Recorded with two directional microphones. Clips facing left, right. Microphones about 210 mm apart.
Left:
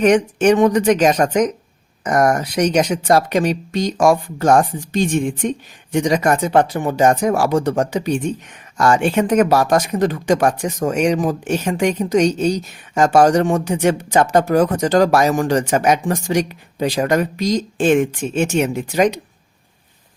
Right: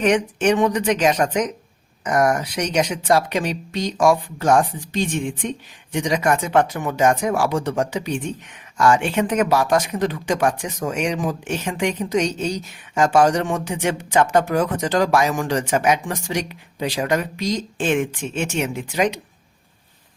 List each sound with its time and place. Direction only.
0.0 s speech: 45° left (ahead or behind)